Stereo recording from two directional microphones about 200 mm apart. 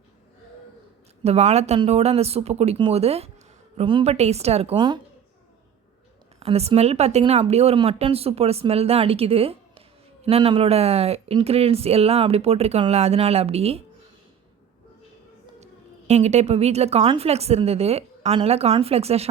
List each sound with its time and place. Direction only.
1.2 s a woman's voice: 30° right (ahead or behind)
6.4 s a woman's voice: 30° right (ahead or behind)
15.6 s a woman's voice: 35° right (ahead or behind)